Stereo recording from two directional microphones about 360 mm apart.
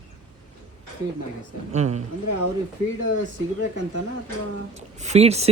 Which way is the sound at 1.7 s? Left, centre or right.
Centre.